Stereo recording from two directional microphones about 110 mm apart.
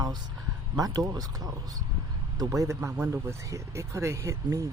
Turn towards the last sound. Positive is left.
turn(degrees=-30)  # may be behind; listen again after turning